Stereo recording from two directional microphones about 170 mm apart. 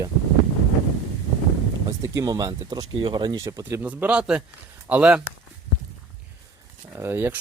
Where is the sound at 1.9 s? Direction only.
20° right (ahead or behind).